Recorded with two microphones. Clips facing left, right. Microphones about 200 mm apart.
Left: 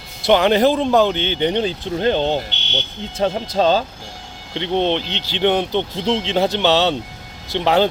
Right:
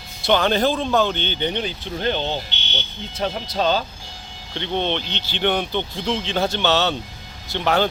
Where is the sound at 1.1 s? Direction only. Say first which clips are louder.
Left 5 dB; 90° left.